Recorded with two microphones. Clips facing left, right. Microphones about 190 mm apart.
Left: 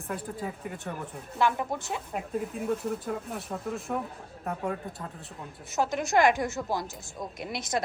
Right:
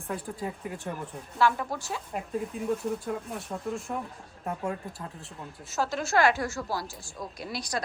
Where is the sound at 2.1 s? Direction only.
Centre (ahead or behind).